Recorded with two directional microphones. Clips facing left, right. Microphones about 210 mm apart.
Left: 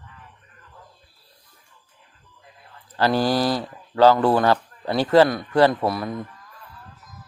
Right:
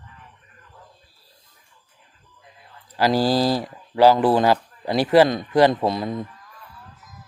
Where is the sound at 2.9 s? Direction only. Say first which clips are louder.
Right 1 dB; 10° right (ahead or behind).